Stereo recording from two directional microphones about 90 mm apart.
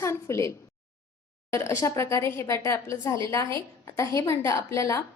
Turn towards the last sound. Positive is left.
turn(degrees=30)  # may be behind; listen again after turning